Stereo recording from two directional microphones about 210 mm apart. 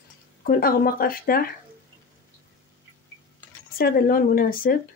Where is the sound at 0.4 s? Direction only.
45° left (ahead or behind).